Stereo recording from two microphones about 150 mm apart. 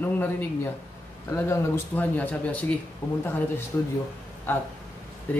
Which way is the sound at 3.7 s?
15° left (ahead or behind).